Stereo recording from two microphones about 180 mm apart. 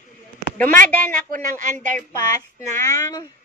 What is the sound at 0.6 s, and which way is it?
Speech, 10° left (ahead or behind).